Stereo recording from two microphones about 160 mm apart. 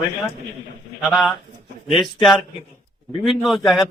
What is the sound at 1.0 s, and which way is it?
Speech, centre (ahead or behind).